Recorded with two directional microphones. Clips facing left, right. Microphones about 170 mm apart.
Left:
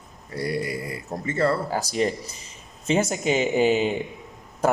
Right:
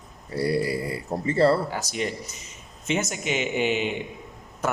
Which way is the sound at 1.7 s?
35° left (ahead or behind).